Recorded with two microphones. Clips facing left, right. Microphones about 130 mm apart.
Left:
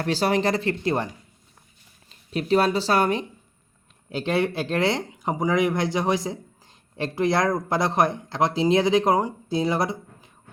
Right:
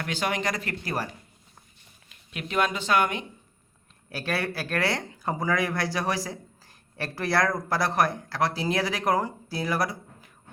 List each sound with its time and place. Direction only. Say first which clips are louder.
0.0 s speech: left 7 dB; 35° left (ahead or behind)
4.1 s speech: left 6 dB; 20° left (ahead or behind)